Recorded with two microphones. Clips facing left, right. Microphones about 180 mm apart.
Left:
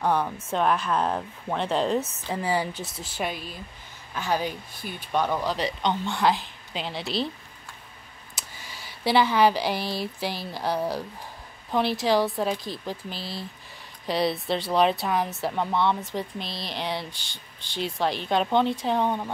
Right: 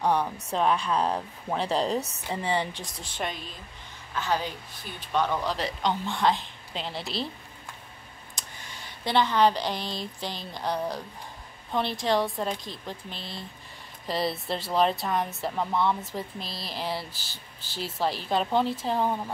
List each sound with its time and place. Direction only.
0.0 s speech: centre (ahead or behind)
5.4 s speech: centre (ahead or behind)
8.4 s speech: 5° left (ahead or behind)